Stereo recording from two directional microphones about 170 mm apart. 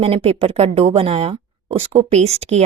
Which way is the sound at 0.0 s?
35° right (ahead or behind).